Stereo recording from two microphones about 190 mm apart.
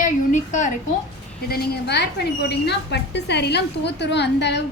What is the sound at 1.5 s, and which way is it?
A woman's voice, 60° left (ahead or behind).